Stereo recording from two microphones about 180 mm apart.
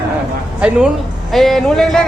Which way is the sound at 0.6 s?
5° right (ahead or behind).